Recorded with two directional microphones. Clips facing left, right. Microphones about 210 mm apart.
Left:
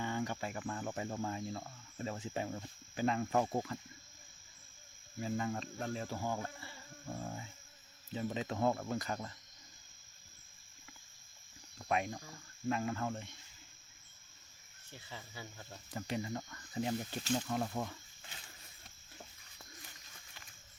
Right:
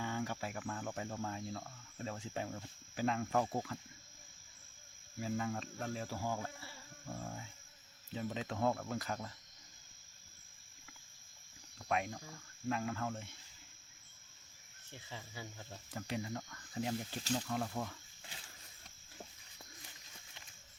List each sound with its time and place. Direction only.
0.0 s speech: centre (ahead or behind)
3.3 s speech: 15° left (ahead or behind)
5.2 s speech: centre (ahead or behind)
7.1 s speech: 10° left (ahead or behind)
11.8 s speech: centre (ahead or behind)
15.1 s speech: 15° right (ahead or behind)
15.9 s speech: centre (ahead or behind)